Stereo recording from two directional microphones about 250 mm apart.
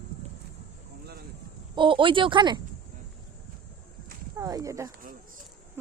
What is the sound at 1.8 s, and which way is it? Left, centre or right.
Speech, centre.